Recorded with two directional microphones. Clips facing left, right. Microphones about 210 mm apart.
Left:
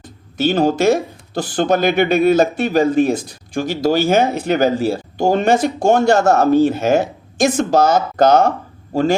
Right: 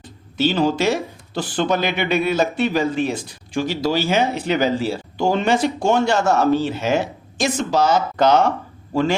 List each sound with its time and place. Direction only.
0.3 s speech: 50° left (ahead or behind)